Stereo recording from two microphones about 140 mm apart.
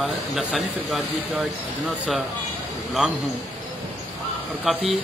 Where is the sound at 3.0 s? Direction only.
5° right (ahead or behind).